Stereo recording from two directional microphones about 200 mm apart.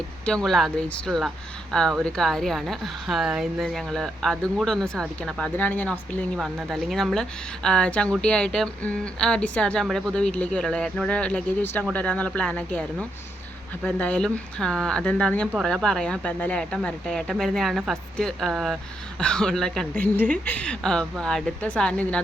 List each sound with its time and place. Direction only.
0.3 s a woman's voice: 5° left (ahead or behind)